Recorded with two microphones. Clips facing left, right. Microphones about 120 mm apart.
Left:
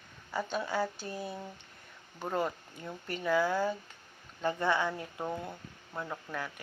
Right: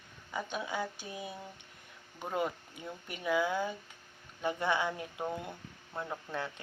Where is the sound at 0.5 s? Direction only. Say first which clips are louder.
Left 5 dB; 5° right (ahead or behind).